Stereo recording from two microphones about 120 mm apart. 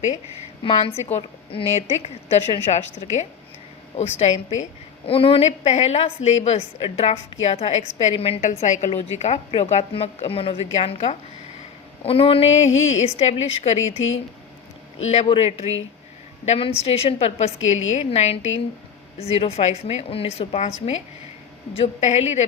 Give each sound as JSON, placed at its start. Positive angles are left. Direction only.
{"t": 0.6, "sound": "a woman's voice", "side_deg": 55}
{"t": 5.5, "sound": "a woman's voice", "side_deg": 70}
{"t": 8.9, "sound": "a woman's voice", "side_deg": 70}
{"t": 12.0, "sound": "a woman's voice", "side_deg": 50}
{"t": 15.0, "sound": "a woman's voice", "side_deg": 70}
{"t": 15.3, "sound": "a woman's voice", "side_deg": 60}